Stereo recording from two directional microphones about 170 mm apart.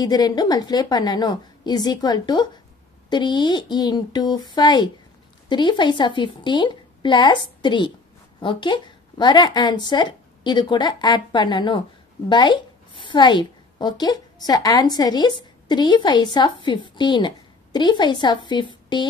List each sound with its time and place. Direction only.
0.0 s a woman's voice: 25° left (ahead or behind)